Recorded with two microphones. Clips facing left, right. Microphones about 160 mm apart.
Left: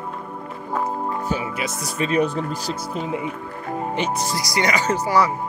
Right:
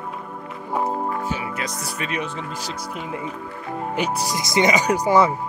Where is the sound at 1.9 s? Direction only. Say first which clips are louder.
Left 9 dB; 30° left (ahead or behind).